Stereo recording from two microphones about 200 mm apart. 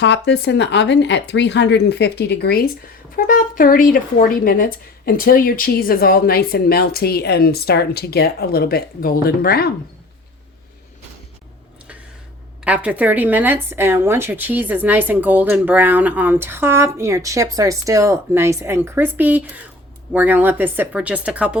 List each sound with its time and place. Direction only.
0.0 s speech: 60° left (ahead or behind)
12.6 s speech: 5° right (ahead or behind)